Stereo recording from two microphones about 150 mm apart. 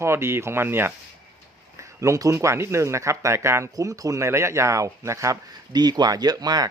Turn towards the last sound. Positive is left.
turn(degrees=-25)  # may be behind; listen again after turning